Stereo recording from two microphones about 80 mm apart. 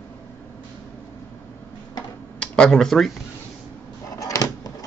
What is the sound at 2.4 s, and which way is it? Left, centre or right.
Speech, centre.